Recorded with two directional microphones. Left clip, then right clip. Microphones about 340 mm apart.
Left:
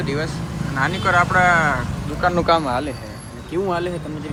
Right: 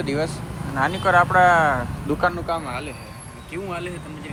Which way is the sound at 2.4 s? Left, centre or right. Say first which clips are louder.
Left 9 dB; left.